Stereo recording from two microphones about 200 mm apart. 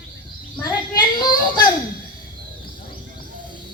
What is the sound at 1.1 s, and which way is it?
Children playing, 20° left (ahead or behind).